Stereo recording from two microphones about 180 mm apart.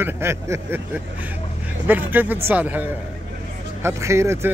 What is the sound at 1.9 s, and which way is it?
Speech, 10° right (ahead or behind).